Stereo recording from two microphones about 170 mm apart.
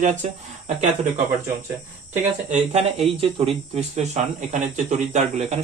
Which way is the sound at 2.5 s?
40° right (ahead or behind).